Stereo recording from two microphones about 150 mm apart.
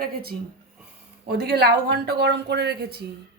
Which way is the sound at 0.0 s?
90° right.